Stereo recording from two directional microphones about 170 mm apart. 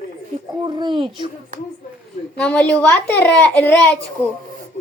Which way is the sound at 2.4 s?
5° left (ahead or behind).